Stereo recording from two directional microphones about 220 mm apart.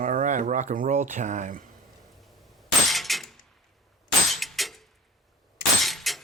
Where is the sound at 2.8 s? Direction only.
Centre (ahead or behind).